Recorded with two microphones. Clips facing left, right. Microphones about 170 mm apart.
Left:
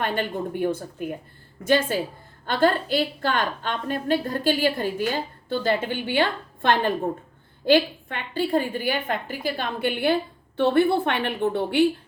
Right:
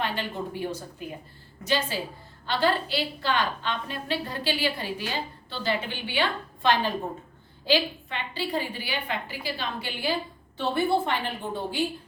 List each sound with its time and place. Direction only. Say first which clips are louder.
0.0 s a woman's voice: left 4 dB; 50° left (ahead or behind); by 11.9 s 65° left (ahead or behind)